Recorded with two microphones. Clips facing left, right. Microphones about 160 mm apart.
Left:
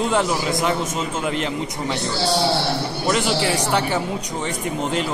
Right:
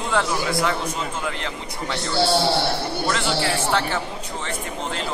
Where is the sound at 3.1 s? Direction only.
15° left (ahead or behind).